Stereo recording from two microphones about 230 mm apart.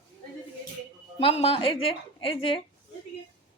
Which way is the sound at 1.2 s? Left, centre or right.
Left.